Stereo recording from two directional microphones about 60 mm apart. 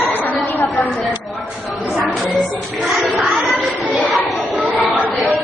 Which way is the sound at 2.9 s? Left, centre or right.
Centre.